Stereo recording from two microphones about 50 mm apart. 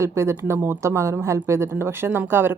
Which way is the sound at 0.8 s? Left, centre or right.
Right.